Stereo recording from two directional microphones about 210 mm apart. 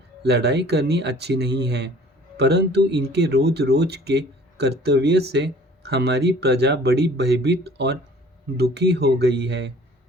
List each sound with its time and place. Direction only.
0.3 s speech: 50° right (ahead or behind)